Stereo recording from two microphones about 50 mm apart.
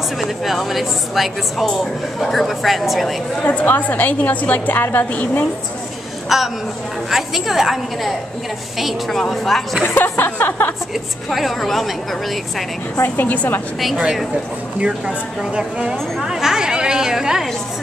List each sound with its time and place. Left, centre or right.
0.2 s speech: centre
3.4 s a woman's voice: left
6.2 s a woman's voice: centre
9.8 s a sound: left
11.2 s speech: centre
13.0 s a woman's voice: left
13.7 s speech: centre
14.8 s speech: centre
16.2 s chatter: centre